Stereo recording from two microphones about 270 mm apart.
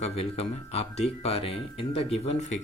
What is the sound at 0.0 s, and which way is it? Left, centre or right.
Speech, left.